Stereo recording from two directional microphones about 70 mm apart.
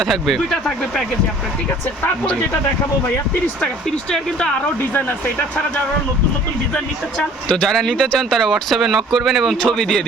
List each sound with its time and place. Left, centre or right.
0.0 s speech: centre
4.1 s speech: centre
4.8 s speech: left
6.7 s speech: centre